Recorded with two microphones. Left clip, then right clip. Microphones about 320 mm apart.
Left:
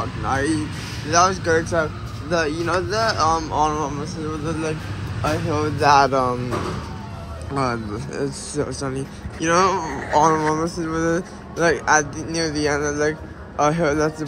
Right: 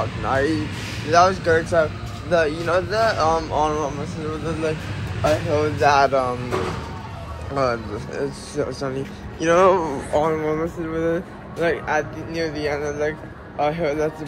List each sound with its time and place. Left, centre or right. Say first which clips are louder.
0.2 s speech: even; centre
7.5 s speech: right 2 dB; centre